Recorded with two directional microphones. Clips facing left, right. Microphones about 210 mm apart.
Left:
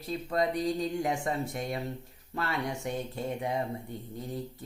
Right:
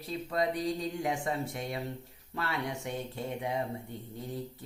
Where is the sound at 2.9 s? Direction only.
45° left (ahead or behind).